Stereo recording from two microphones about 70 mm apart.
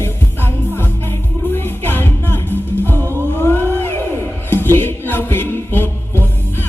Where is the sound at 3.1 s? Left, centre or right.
Right.